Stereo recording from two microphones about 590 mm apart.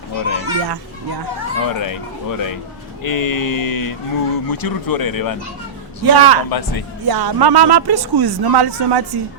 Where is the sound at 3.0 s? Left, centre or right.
Left.